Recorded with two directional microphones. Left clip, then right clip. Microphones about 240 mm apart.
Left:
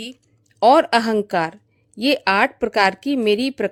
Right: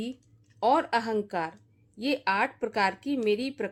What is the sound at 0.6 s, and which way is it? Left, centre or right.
A woman's voice, left.